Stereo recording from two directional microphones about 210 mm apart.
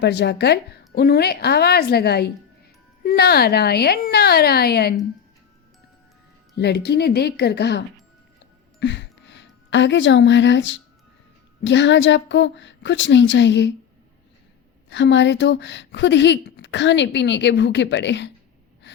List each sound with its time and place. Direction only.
0.0 s a woman's voice: 55° left (ahead or behind)
6.6 s a woman's voice: 50° left (ahead or behind)
8.8 s a sound: 55° left (ahead or behind)
11.6 s speech: 60° left (ahead or behind)
14.8 s speech: 60° left (ahead or behind)